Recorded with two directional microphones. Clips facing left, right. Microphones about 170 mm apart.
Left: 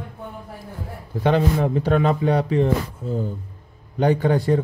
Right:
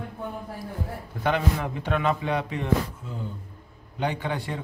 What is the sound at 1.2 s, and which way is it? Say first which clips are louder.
Mantra: left 7 dB; 35° left (ahead or behind).